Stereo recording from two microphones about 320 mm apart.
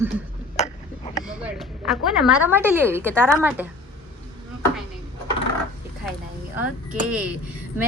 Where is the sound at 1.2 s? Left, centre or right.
Centre.